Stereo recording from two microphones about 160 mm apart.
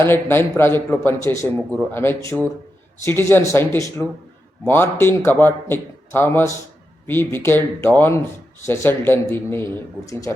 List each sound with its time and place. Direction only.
0.0 s a man's voice: 15° left (ahead or behind)